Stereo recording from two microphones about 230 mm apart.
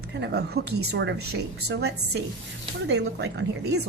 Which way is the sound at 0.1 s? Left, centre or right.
Right.